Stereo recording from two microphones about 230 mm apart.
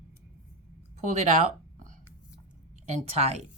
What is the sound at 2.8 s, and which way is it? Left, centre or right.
Speech, right.